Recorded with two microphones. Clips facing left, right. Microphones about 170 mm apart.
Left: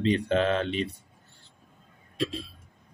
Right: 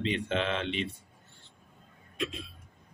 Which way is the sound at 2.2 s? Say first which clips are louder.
Left 5 dB; 30° left (ahead or behind).